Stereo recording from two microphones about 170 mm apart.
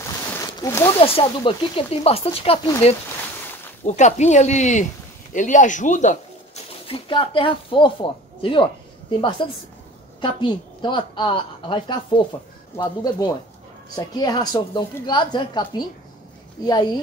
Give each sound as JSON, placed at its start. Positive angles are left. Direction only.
{"t": 0.0, "sound": "a sound", "side_deg": 20}
{"t": 0.9, "sound": "speech", "side_deg": 35}
{"t": 6.9, "sound": "a woman's voice", "side_deg": 30}